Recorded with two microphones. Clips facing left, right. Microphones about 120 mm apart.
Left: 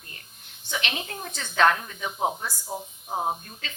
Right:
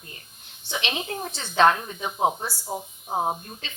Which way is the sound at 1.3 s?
30° right (ahead or behind).